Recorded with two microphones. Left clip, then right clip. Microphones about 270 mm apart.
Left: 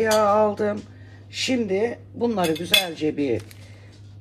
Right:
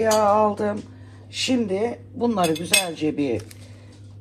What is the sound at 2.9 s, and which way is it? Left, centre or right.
Cutlery, right.